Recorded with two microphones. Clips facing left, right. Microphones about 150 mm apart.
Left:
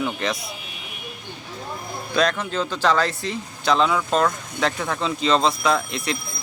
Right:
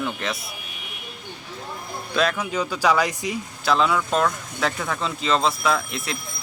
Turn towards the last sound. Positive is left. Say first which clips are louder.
# left 2 dB
turn(degrees=0)  # may be behind; listen again after turning